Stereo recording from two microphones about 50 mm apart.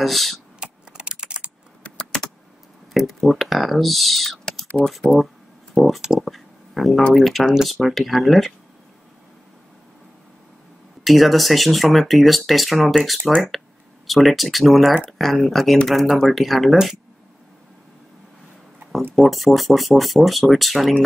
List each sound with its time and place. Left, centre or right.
0.0 s speech: centre
0.6 s computer keyboard: centre
1.8 s keys jangling: centre
2.9 s speech: centre
4.8 s speech: centre
5.9 s speech: centre
6.3 s a sound: centre
7.2 s speech: centre
11.1 s speech: centre
19.1 s speech: centre